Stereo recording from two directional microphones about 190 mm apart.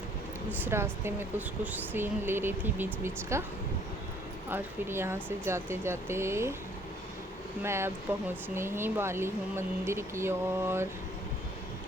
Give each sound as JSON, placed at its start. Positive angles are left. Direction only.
{"t": 0.6, "sound": "speech", "side_deg": -15}
{"t": 4.4, "sound": "speech", "side_deg": -10}
{"t": 7.6, "sound": "speech", "side_deg": -15}